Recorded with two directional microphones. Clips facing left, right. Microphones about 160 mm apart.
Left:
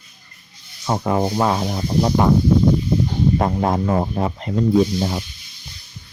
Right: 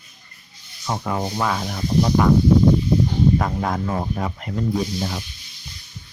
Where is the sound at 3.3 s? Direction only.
30° left (ahead or behind).